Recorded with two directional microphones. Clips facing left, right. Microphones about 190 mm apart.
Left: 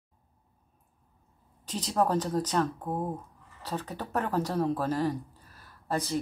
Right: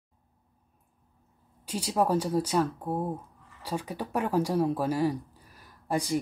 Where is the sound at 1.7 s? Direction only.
10° right (ahead or behind).